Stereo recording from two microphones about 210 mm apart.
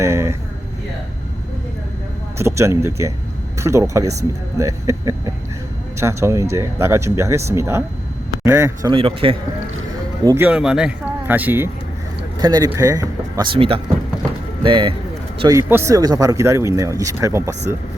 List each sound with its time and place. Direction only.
0.0 s speech: 15° right (ahead or behind)
2.4 s speech: 15° right (ahead or behind)
9.0 s speech: 25° right (ahead or behind)
10.2 s speech: 10° right (ahead or behind)